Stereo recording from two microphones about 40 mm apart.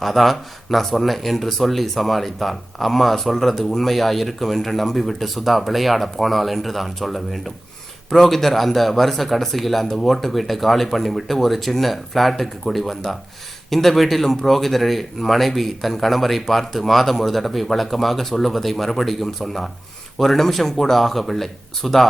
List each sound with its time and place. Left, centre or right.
0.0 s speech: centre